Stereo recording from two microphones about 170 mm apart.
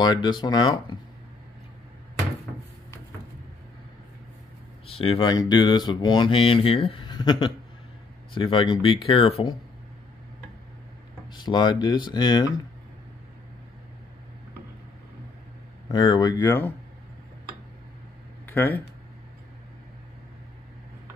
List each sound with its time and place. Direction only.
0.0 s speech: 25° left (ahead or behind)
4.8 s speech: 35° left (ahead or behind)
11.3 s speech: 25° left (ahead or behind)
15.9 s speech: 25° left (ahead or behind)
18.4 s a sound: 10° left (ahead or behind)